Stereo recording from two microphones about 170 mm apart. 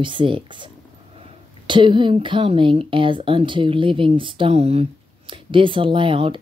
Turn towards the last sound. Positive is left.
turn(degrees=-30)  # may be behind; listen again after turning